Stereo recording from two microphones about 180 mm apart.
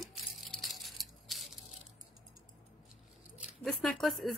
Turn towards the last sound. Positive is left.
turn(degrees=0)  # may be behind; listen again after turning